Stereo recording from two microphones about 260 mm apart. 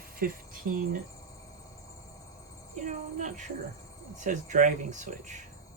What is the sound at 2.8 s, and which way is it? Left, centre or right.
Speech, right.